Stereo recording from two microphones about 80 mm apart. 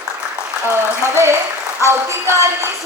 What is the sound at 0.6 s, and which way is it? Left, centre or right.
A woman's voice, right.